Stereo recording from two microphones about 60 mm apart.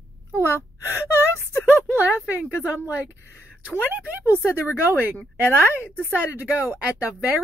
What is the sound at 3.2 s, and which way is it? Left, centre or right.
Speech, left.